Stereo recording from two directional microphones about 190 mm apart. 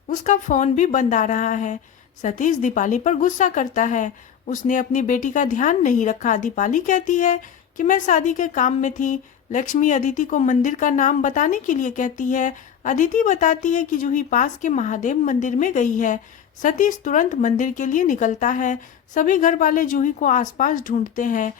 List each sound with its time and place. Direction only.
0.1 s a woman's voice: 40° left (ahead or behind)